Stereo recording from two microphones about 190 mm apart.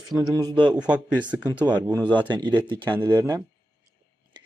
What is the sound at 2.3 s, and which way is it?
Speech, 25° right (ahead or behind).